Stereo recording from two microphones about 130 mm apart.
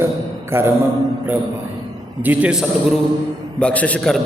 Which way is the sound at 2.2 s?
10° right (ahead or behind).